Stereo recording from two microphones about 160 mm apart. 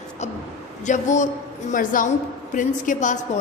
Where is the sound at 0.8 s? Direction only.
50° left (ahead or behind).